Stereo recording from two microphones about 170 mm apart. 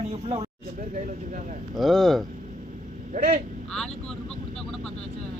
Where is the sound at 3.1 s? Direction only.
50° right (ahead or behind).